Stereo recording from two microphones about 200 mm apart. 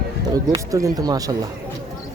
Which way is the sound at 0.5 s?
15° right (ahead or behind).